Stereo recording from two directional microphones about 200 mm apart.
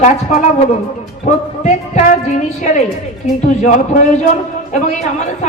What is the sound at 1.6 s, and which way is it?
A man's voice, 35° left (ahead or behind).